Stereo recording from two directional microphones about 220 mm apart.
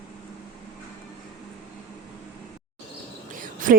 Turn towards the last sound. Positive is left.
turn(degrees=-35)  # may be behind; listen again after turning